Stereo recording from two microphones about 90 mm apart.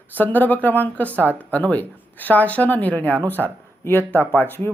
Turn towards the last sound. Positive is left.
turn(degrees=20)  # may be behind; listen again after turning